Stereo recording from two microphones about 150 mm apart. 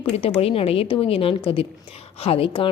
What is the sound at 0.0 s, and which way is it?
A woman's voice, 40° left (ahead or behind).